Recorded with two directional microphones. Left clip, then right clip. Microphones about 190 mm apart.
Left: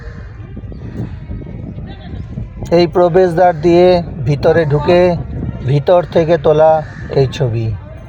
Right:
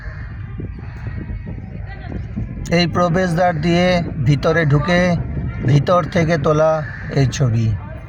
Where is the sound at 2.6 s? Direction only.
5° right (ahead or behind).